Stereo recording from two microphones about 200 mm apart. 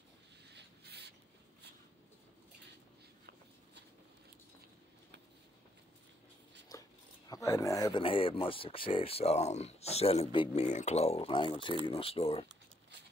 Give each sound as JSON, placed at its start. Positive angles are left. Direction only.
{"t": 0.5, "sound": "a sound", "side_deg": -55}
{"t": 6.7, "sound": "dog", "side_deg": 15}
{"t": 7.2, "sound": "speech", "side_deg": 15}